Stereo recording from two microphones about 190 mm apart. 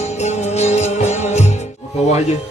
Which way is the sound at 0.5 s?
35° left (ahead or behind).